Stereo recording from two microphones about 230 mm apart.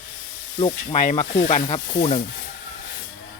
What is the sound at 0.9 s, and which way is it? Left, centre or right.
Speech, left.